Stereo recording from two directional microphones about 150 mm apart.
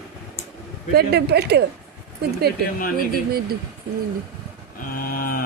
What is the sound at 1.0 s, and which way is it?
Speech, 90° right.